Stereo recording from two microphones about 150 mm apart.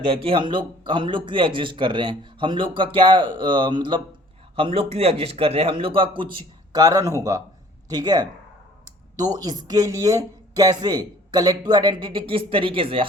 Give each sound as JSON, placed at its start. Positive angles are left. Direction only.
{"t": 0.0, "sound": "a man's voice", "side_deg": -40}
{"t": 6.7, "sound": "speech", "side_deg": -25}